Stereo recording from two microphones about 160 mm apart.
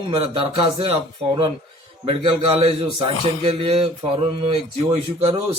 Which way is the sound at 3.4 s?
35° right (ahead or behind).